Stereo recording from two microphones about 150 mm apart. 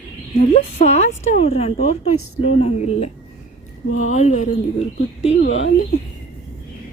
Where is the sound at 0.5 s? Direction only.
45° left (ahead or behind).